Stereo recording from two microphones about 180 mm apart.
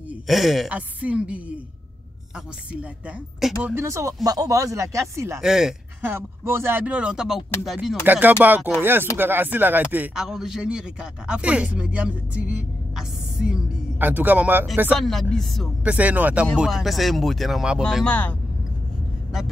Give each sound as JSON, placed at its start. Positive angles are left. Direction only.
{"t": 0.3, "sound": "speech", "side_deg": 0}
{"t": 3.6, "sound": "speech", "side_deg": -15}
{"t": 5.4, "sound": "speech", "side_deg": -5}
{"t": 6.1, "sound": "speech", "side_deg": -15}
{"t": 15.0, "sound": "speech", "side_deg": 0}